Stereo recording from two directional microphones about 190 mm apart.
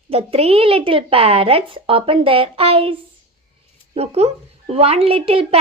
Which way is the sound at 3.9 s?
35° right (ahead or behind).